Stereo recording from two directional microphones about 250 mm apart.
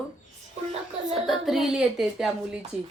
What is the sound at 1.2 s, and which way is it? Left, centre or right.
A woman's voice, centre.